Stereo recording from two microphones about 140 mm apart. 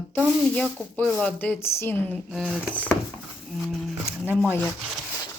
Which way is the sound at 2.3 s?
5° right (ahead or behind).